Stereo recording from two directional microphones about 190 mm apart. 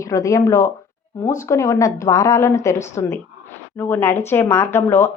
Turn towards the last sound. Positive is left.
turn(degrees=10)  # may be behind; listen again after turning